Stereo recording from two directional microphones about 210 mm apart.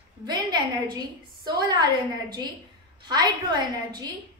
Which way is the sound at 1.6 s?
20° right (ahead or behind).